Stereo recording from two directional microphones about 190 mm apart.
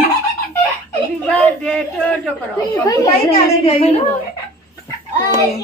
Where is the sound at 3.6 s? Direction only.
35° left (ahead or behind).